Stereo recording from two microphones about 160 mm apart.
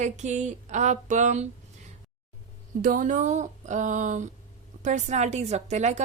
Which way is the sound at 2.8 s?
55° right (ahead or behind).